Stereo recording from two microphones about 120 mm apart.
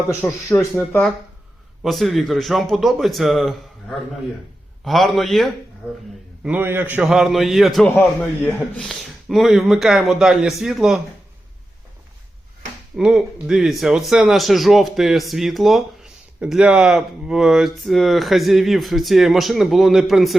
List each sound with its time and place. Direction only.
0.5 s speech: 20° left (ahead or behind)
1.8 s speech: centre (ahead or behind)
6.4 s speech: 15° right (ahead or behind)
8.2 s a man's voice: 15° left (ahead or behind)
8.9 s speech: centre (ahead or behind)
13.0 s speech: 5° right (ahead or behind)